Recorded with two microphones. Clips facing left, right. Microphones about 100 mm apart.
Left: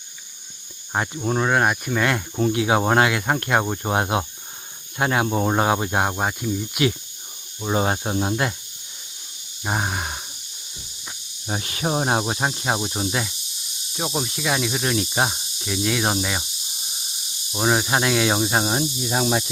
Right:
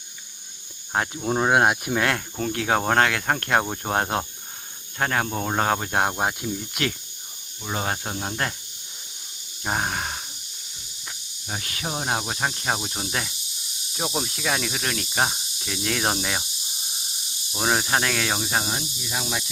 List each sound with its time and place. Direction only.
0.9 s speech: centre (ahead or behind)
1.4 s speech: 10° right (ahead or behind)
2.0 s speech: centre (ahead or behind)
7.6 s speech: 25° left (ahead or behind)
9.6 s speech: 5° left (ahead or behind)
11.4 s speech: 25° left (ahead or behind)
12.2 s speech: 20° left (ahead or behind); by 16.5 s centre (ahead or behind)
17.6 s speech: 5° left (ahead or behind); by 18.9 s 30° left (ahead or behind)
18.9 s speech: 45° left (ahead or behind)